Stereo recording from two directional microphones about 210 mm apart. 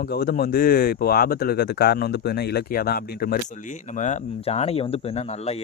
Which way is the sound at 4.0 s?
30° left (ahead or behind).